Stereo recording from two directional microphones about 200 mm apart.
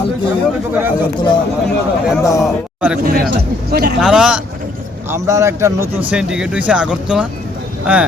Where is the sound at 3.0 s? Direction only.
50° right (ahead or behind).